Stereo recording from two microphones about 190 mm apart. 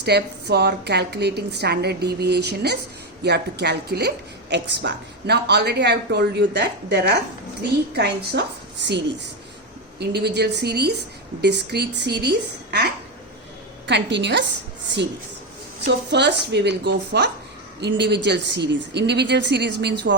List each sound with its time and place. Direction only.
0.0 s a woman's voice: 60° right (ahead or behind)
10.0 s a woman's voice: 60° right (ahead or behind)
16.1 s a woman's voice: 65° right (ahead or behind)